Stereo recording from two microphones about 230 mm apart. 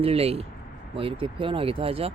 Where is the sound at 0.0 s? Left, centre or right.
Right.